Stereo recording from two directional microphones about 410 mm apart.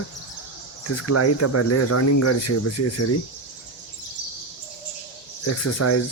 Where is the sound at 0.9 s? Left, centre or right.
Left.